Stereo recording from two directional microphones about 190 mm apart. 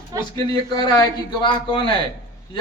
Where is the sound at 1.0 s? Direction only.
25° left (ahead or behind).